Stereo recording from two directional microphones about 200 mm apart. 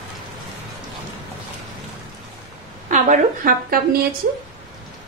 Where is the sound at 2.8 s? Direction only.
35° right (ahead or behind).